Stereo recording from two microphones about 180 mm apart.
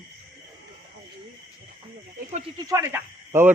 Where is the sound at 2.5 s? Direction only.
15° right (ahead or behind).